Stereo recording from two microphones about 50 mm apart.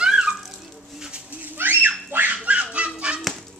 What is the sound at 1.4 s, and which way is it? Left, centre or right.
Dog, right.